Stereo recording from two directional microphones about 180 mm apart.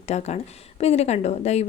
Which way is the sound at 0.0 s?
35° left (ahead or behind).